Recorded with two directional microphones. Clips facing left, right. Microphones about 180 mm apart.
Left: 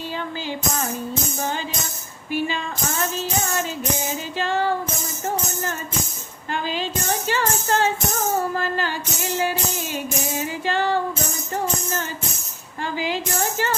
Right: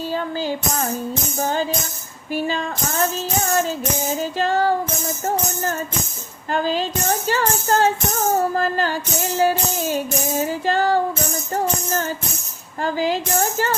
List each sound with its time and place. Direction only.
0.1 s music: 40° right (ahead or behind)
2.3 s music: 40° right (ahead or behind)
6.5 s music: 40° right (ahead or behind)